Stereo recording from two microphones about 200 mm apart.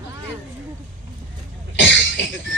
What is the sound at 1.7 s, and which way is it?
Cough, 65° left (ahead or behind).